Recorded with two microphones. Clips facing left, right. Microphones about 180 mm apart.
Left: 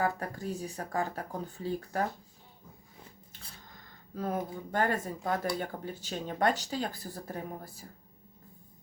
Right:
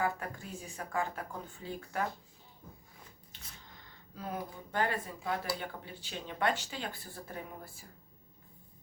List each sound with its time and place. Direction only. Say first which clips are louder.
0.0 s speech: left 3 dB; 40° left (ahead or behind)
4.1 s speech: left 7 dB; 45° left (ahead or behind)